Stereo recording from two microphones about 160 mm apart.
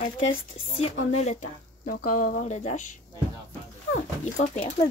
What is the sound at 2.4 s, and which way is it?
Speech, 45° left (ahead or behind).